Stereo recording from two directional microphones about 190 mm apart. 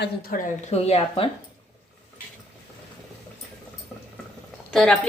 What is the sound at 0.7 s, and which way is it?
Speech, 30° left (ahead or behind).